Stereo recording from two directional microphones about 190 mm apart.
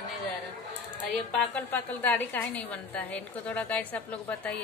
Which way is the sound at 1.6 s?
10° left (ahead or behind).